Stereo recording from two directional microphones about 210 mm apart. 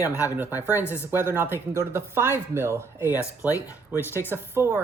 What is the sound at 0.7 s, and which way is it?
Speech, 10° right (ahead or behind).